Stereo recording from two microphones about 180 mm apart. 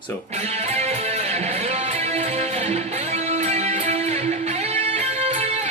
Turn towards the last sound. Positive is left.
turn(degrees=-40)  # may be behind; listen again after turning